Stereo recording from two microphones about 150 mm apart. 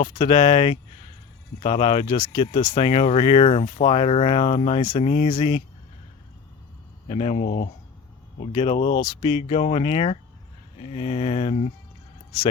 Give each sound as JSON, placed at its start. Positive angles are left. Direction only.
{"t": 0.0, "sound": "speech", "side_deg": 30}
{"t": 7.1, "sound": "speech", "side_deg": 45}
{"t": 9.0, "sound": "speech", "side_deg": 30}